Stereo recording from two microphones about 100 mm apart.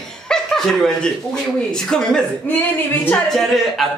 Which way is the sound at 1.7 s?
5° left (ahead or behind).